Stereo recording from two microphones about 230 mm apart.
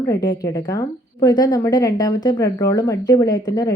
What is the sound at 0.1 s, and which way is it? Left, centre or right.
A woman's voice, centre.